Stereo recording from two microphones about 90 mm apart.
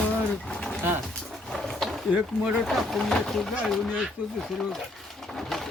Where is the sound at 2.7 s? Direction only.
5° left (ahead or behind).